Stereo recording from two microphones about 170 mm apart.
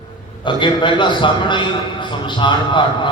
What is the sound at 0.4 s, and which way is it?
A man's voice, 30° left (ahead or behind).